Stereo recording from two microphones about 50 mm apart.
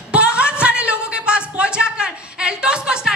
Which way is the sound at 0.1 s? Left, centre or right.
Right.